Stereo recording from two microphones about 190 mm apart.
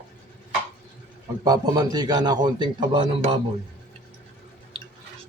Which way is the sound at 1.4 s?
20° right (ahead or behind).